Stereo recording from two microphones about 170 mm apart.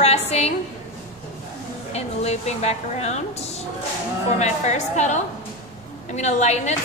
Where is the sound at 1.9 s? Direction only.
40° left (ahead or behind).